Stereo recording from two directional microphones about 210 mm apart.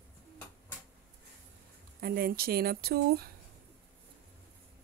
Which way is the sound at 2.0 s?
45° right (ahead or behind).